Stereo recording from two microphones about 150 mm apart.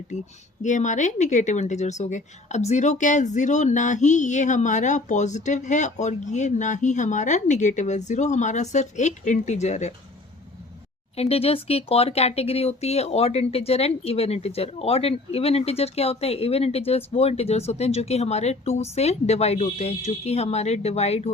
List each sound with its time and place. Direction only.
0.6 s speech: 55° left (ahead or behind)
11.2 s speech: 40° left (ahead or behind)